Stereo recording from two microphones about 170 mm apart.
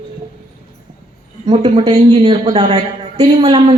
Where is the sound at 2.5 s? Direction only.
40° right (ahead or behind).